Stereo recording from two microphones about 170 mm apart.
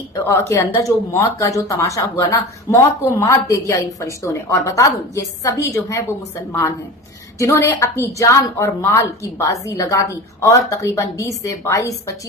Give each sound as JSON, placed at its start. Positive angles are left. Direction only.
{"t": 0.3, "sound": "a woman's voice", "side_deg": 15}
{"t": 7.3, "sound": "a woman's voice", "side_deg": 15}